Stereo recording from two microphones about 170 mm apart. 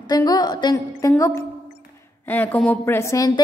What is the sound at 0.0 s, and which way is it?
A woman's voice, 25° left (ahead or behind).